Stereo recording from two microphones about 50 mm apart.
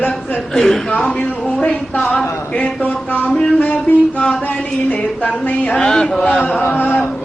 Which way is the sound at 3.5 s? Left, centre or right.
Left.